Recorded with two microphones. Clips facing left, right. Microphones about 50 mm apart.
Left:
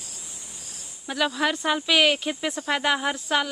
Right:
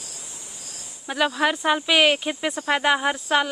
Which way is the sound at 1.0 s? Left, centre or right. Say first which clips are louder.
Right 3 dB; centre.